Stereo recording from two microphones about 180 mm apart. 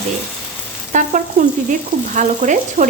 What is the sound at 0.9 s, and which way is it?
A woman's voice, 45° right (ahead or behind).